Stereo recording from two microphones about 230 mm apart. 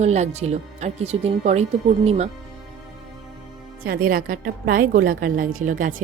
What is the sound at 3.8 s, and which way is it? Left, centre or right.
A woman's voice, right.